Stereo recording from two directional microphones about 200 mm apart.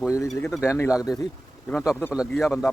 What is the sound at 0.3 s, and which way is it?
Speech, centre (ahead or behind).